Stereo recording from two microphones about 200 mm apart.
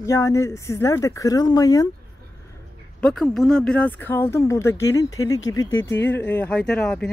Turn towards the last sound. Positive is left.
turn(degrees=5)  # may be behind; listen again after turning